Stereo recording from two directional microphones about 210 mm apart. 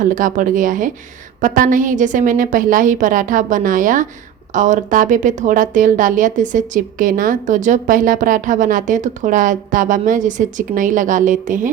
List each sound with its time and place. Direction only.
0.0 s a woman's voice: 40° right (ahead or behind)